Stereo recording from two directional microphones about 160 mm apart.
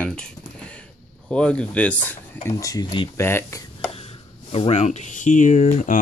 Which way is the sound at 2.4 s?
20° left (ahead or behind).